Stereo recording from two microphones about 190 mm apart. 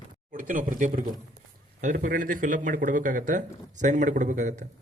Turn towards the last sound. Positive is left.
turn(degrees=-40)  # may be behind; listen again after turning